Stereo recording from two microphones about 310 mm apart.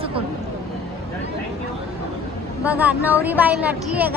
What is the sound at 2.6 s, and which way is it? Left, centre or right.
A woman's voice, centre.